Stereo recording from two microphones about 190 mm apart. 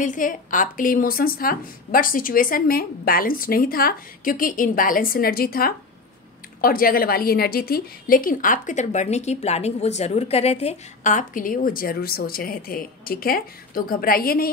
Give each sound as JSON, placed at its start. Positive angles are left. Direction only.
{"t": 0.0, "sound": "a woman's voice", "side_deg": 45}